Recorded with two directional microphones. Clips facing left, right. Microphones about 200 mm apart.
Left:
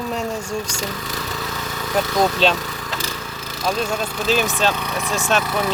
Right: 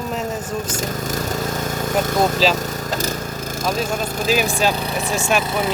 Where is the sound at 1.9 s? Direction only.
45° right (ahead or behind).